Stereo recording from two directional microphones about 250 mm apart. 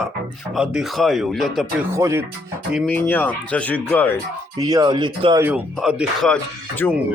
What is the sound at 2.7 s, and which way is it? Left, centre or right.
Speech, centre.